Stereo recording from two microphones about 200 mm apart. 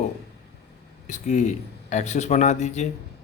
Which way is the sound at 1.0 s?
35° left (ahead or behind).